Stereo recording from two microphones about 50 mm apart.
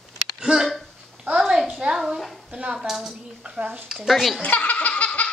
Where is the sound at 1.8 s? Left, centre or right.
Right.